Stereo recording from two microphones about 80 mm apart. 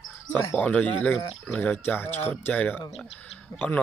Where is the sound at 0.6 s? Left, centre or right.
Centre.